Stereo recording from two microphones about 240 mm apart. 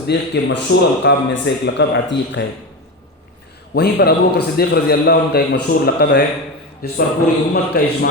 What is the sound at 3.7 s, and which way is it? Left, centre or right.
A man's voice, left.